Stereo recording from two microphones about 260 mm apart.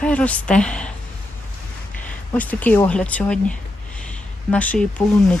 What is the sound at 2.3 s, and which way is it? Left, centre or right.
A woman's voice, centre.